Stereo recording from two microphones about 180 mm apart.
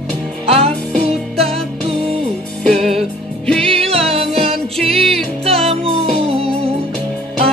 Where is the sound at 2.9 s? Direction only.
5° left (ahead or behind).